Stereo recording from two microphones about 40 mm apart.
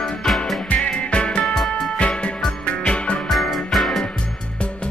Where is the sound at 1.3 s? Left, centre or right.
Centre.